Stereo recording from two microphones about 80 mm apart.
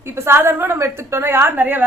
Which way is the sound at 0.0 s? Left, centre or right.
Right.